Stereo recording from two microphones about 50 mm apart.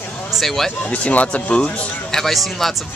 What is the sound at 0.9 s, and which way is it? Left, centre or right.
Speech, left.